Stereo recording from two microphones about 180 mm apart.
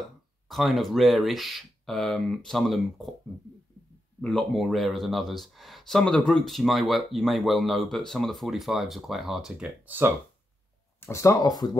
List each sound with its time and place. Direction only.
0.5 s speech: centre (ahead or behind)
4.2 s speech: centre (ahead or behind)
11.0 s speech: 15° left (ahead or behind)